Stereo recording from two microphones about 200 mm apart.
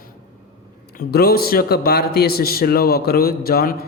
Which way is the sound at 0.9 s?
50° left (ahead or behind).